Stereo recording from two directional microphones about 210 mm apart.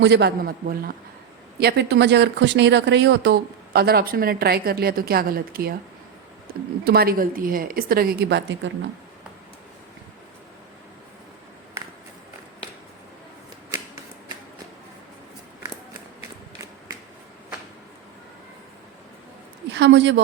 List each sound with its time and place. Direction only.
0.0 s speech: 55° right (ahead or behind)
19.7 s speech: 60° right (ahead or behind)